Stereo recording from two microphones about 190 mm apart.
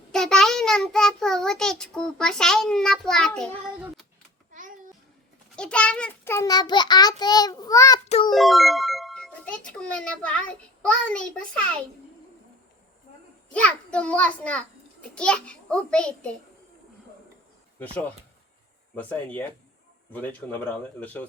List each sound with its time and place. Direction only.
0.1 s child singing: 5° left (ahead or behind)
5.5 s a child's voice: 5° left (ahead or behind)
8.0 s music: 35° left (ahead or behind)
8.3 s a child's voice: centre (ahead or behind)
13.5 s a child's voice: 5° left (ahead or behind)
18.9 s a child's voice: 10° left (ahead or behind)